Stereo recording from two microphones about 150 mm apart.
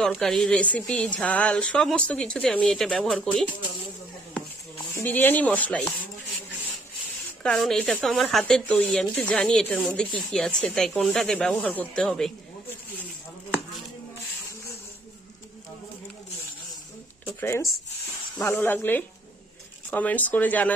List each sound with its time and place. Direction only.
0.0 s speech: 5° left (ahead or behind)
4.9 s speech: 15° left (ahead or behind)
7.4 s speech: 5° left (ahead or behind)
17.2 s a sound: 15° left (ahead or behind)
18.4 s speech: 15° left (ahead or behind)